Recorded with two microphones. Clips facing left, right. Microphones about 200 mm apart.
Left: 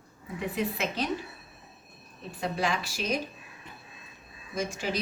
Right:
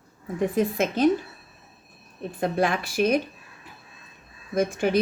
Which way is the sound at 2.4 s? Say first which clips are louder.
Right 6 dB; 55° right (ahead or behind).